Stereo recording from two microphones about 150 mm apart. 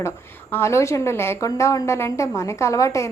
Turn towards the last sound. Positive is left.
turn(degrees=20)  # may be behind; listen again after turning